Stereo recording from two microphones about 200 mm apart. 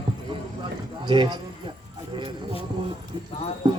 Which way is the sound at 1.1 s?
20° right (ahead or behind).